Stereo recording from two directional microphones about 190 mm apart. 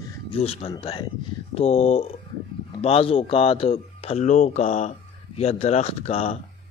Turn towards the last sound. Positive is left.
turn(degrees=30)  # may be behind; listen again after turning